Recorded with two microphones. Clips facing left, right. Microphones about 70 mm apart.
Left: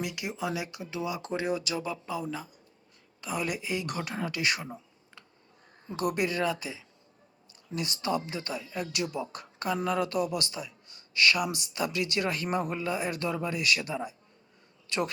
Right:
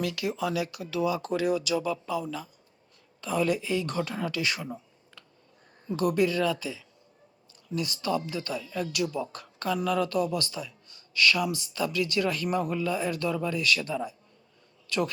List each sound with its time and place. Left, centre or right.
0.0 s speech: centre